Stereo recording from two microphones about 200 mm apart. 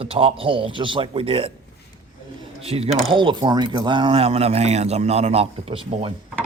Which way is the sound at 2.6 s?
30° right (ahead or behind).